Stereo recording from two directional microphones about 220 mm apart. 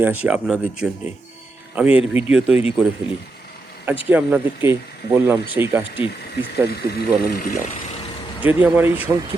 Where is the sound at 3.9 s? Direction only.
10° right (ahead or behind).